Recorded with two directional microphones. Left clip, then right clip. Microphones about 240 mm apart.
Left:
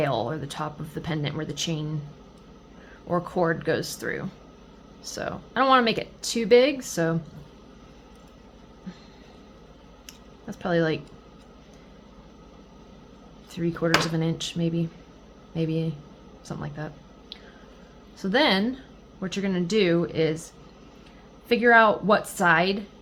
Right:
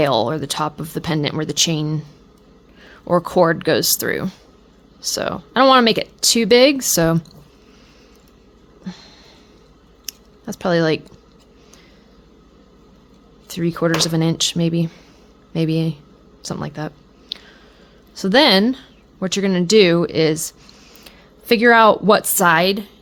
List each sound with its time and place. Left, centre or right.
0.0 s speech: right
3.1 s speech: right
10.1 s keys jangling: right
13.5 s speech: right
16.4 s a sound: right
18.1 s speech: right